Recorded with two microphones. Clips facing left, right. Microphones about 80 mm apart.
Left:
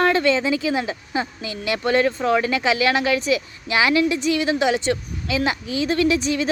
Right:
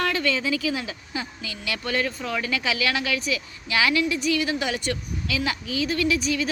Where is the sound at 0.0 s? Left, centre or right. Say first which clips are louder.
Left 7 dB; left.